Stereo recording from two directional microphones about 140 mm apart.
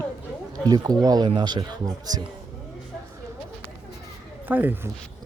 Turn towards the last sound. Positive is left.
turn(degrees=-15)  # may be behind; listen again after turning